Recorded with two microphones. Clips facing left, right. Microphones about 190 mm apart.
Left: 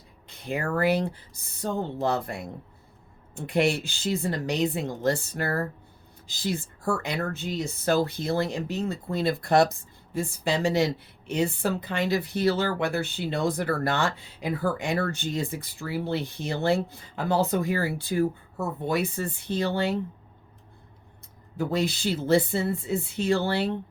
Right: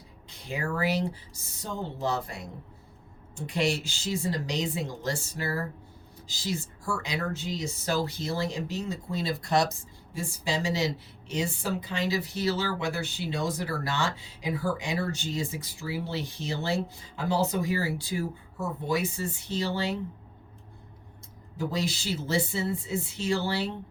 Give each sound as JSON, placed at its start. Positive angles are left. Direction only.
{"t": 0.3, "sound": "speech", "side_deg": 55}
{"t": 21.6, "sound": "speech", "side_deg": 55}